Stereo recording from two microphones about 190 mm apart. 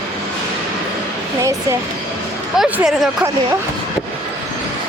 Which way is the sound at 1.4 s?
15° right (ahead or behind).